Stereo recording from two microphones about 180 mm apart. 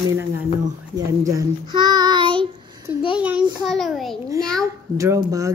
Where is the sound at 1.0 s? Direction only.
20° right (ahead or behind).